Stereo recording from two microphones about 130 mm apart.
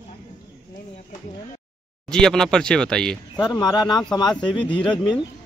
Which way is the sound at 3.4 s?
30° left (ahead or behind).